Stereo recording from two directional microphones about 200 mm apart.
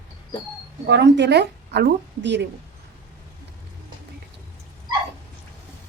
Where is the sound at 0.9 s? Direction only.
60° right (ahead or behind).